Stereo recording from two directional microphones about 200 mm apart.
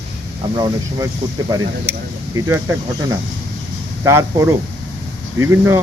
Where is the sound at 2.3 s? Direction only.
15° right (ahead or behind).